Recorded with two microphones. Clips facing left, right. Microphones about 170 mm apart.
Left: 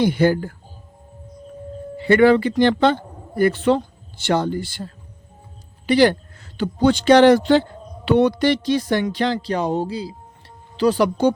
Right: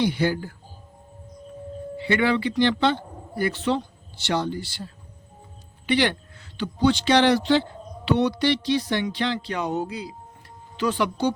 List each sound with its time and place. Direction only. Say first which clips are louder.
0.0 s speech: left 6 dB; 50° left (ahead or behind)
2.0 s speech: left 9 dB; 45° left (ahead or behind)
5.8 s speech: left 7 dB; 40° left (ahead or behind)